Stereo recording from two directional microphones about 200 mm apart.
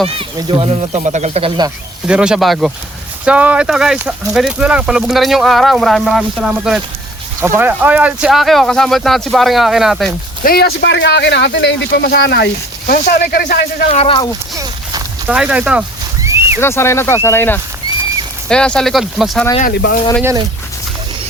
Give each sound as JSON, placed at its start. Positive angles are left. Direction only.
{"t": 0.2, "sound": "speech", "side_deg": -25}
{"t": 2.0, "sound": "speech", "side_deg": -5}
{"t": 10.4, "sound": "speech", "side_deg": 50}
{"t": 13.9, "sound": "speech", "side_deg": 25}
{"t": 14.5, "sound": "a sound", "side_deg": -15}
{"t": 15.4, "sound": "speech", "side_deg": -5}
{"t": 16.2, "sound": "a sound", "side_deg": -15}
{"t": 16.6, "sound": "speech", "side_deg": 10}
{"t": 19.7, "sound": "speech", "side_deg": 55}